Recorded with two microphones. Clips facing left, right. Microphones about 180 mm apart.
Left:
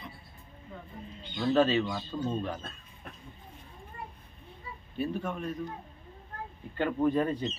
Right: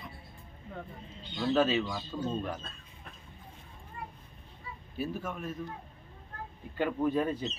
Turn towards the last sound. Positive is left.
turn(degrees=-5)  # may be behind; listen again after turning